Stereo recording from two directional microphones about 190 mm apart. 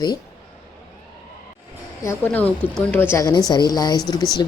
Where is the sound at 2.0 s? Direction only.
10° left (ahead or behind).